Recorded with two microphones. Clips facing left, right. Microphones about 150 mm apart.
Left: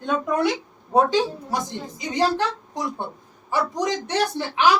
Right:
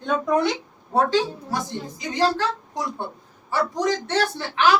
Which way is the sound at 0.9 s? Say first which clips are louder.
Left 1 dB; 15° left (ahead or behind).